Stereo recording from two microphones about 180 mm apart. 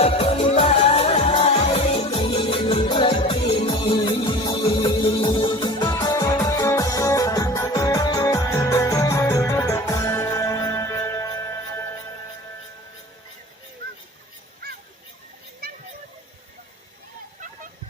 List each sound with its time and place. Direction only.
0.0 s music: 35° left (ahead or behind); by 11.8 s 15° left (ahead or behind)